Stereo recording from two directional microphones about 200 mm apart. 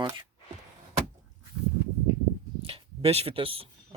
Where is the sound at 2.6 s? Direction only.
30° right (ahead or behind).